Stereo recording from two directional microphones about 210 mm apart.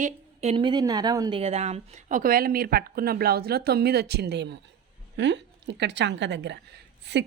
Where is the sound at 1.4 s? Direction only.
30° right (ahead or behind).